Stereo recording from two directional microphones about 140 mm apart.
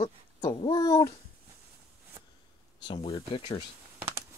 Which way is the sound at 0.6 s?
35° left (ahead or behind).